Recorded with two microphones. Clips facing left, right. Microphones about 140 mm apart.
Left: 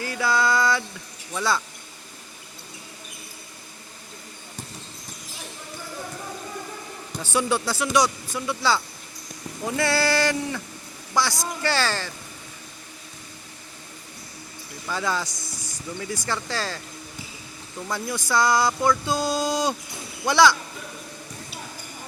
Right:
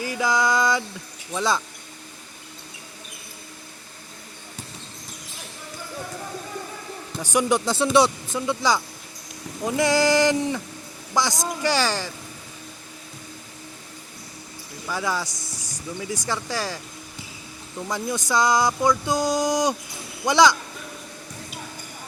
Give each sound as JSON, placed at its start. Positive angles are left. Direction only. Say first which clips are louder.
{"t": 0.0, "sound": "a sound", "louder": "right 1 dB", "side_deg": -15}
{"t": 1.3, "sound": "speech", "louder": "right 1 dB", "side_deg": -20}
{"t": 7.2, "sound": "speech", "louder": "right 3 dB", "side_deg": -15}
{"t": 14.8, "sound": "speech", "louder": "even", "side_deg": -10}
{"t": 17.9, "sound": "speech", "louder": "right 1 dB", "side_deg": -20}